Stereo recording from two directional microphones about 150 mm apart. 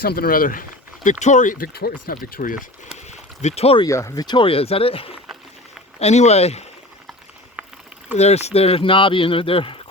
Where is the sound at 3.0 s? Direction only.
50° left (ahead or behind).